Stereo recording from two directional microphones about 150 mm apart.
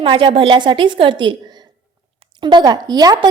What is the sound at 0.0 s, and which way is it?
A woman's voice, 35° right (ahead or behind).